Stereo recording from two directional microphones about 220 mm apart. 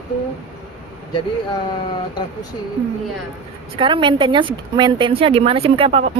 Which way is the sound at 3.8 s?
20° right (ahead or behind).